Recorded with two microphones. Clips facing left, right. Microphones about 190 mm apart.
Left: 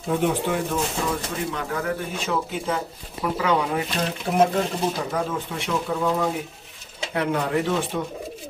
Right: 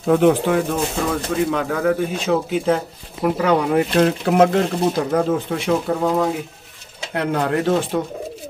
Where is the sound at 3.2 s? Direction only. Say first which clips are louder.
Right 5 dB; 45° right (ahead or behind).